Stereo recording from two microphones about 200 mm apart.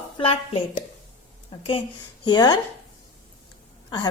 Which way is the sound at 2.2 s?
20° left (ahead or behind).